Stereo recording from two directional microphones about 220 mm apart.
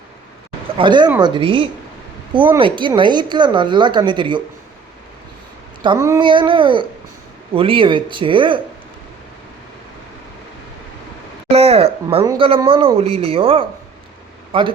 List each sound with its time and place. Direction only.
0.8 s speech: 20° right (ahead or behind)
5.8 s speech: 15° right (ahead or behind)
11.4 s speech: 25° right (ahead or behind)